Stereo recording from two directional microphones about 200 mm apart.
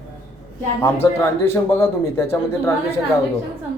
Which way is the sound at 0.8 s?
10° left (ahead or behind).